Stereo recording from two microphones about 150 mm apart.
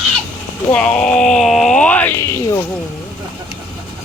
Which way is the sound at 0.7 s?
5° left (ahead or behind).